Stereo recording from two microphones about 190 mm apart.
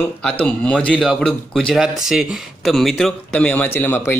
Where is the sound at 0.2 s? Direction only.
5° left (ahead or behind).